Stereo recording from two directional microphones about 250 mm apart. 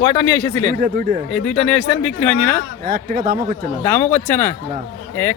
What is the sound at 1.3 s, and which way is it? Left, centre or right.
Speech, centre.